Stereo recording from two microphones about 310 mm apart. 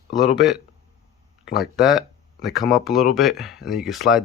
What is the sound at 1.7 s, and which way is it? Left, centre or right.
Speech, centre.